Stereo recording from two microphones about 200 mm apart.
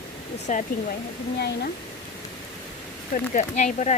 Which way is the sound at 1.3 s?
55° left (ahead or behind).